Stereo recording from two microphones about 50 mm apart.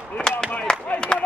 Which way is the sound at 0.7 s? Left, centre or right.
Centre.